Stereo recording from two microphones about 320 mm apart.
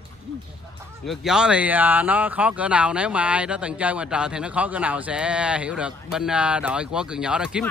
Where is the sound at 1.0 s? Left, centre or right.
Centre.